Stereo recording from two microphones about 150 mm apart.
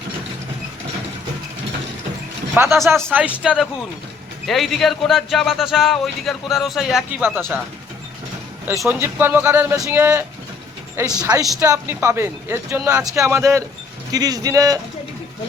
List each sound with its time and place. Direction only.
2.6 s speech: 20° right (ahead or behind)
8.9 s speech: 15° right (ahead or behind)